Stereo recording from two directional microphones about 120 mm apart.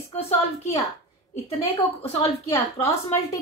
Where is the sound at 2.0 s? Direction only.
55° left (ahead or behind).